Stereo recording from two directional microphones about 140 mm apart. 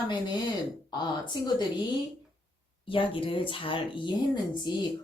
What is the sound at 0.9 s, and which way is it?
Speech, 30° left (ahead or behind).